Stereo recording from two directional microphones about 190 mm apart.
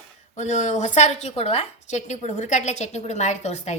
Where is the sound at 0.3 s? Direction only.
40° left (ahead or behind).